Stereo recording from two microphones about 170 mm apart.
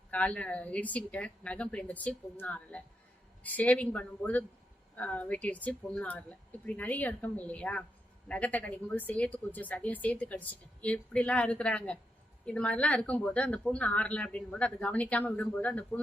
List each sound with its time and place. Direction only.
0.1 s a woman's voice: 10° left (ahead or behind)